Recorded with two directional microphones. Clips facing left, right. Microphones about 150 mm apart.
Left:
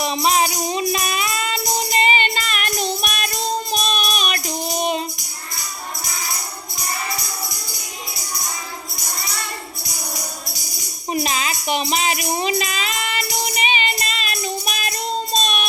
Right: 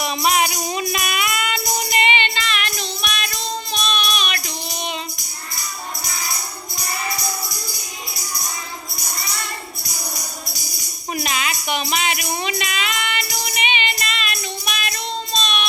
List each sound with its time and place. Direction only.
0.0 s music: 30° left (ahead or behind)
11.1 s music: 30° left (ahead or behind)